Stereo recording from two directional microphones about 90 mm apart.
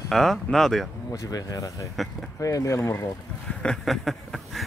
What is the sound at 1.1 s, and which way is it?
Speech, 40° left (ahead or behind).